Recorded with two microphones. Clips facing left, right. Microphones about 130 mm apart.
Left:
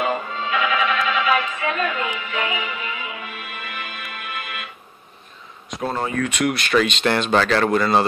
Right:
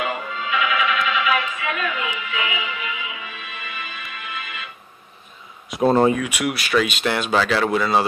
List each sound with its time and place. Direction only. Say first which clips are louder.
0.0 s music: left 3 dB; 35° left (ahead or behind); by 4.6 s 55° left (ahead or behind)
5.8 s speech: right 9 dB; 25° right (ahead or behind)
6.1 s speech: left 2 dB; 10° right (ahead or behind)